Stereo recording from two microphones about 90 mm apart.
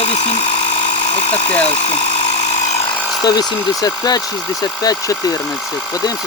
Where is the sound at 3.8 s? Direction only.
45° left (ahead or behind).